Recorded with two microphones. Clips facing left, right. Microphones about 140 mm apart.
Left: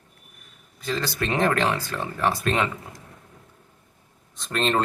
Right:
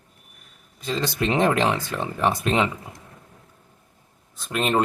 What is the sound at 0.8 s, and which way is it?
Speech, 20° right (ahead or behind).